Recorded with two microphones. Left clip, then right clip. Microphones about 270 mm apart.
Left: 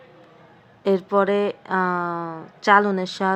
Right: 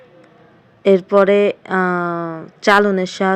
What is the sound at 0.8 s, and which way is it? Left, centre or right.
A woman's voice, centre.